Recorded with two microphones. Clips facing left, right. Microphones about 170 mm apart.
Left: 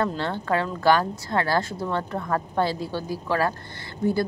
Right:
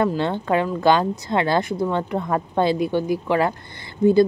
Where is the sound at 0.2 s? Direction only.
15° right (ahead or behind).